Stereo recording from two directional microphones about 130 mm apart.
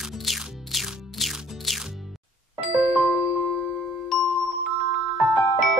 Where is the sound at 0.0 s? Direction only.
Centre (ahead or behind).